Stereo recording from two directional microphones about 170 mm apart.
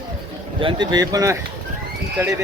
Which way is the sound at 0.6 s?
30° right (ahead or behind).